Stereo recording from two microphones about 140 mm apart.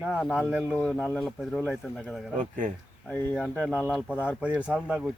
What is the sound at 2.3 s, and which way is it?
Speech, 65° right (ahead or behind).